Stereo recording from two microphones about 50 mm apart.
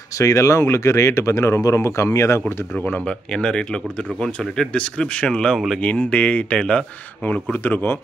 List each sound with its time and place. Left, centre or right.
0.2 s speech: left
3.1 s speech: left
7.6 s speech: left